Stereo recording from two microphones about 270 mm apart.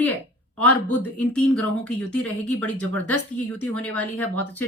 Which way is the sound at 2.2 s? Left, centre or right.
Centre.